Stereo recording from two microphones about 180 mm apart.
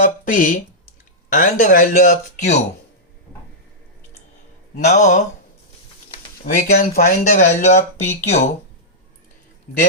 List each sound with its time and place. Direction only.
0.0 s speech: 45° left (ahead or behind)
4.8 s speech: 40° left (ahead or behind)